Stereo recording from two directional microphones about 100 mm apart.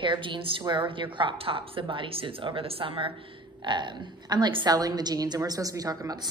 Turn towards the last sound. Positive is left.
turn(degrees=-35)  # may be behind; listen again after turning